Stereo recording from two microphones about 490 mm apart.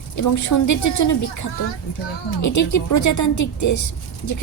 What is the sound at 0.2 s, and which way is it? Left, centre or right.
A woman's voice, left.